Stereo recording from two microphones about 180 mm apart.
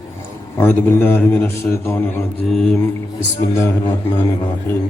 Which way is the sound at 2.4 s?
5° left (ahead or behind).